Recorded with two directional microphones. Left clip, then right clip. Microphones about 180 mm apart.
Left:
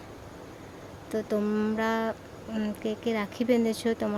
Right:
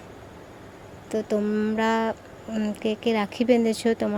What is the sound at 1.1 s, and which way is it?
Speech, 5° right (ahead or behind).